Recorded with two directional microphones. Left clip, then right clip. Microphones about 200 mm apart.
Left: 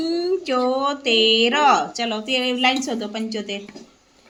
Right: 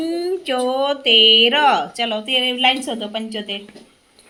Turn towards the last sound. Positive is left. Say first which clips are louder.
# right 2 dB
turn(degrees=-5)  # may be behind; listen again after turning